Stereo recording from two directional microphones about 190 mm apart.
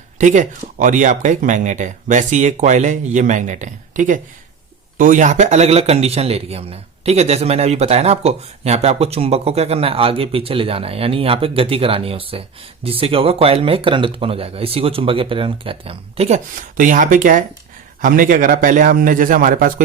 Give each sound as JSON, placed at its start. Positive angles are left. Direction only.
{"t": 0.2, "sound": "a man's voice", "side_deg": -40}